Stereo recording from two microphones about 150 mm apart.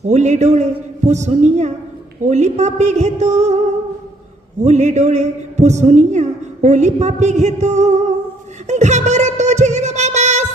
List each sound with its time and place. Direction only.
0.1 s a woman's voice: 50° right (ahead or behind)
4.6 s a woman's voice: 50° right (ahead or behind)
8.6 s music: 50° right (ahead or behind)